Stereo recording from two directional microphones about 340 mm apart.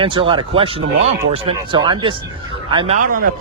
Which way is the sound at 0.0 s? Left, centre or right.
Centre.